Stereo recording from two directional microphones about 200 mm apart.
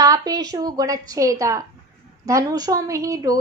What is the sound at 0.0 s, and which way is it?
A woman's voice, 20° right (ahead or behind).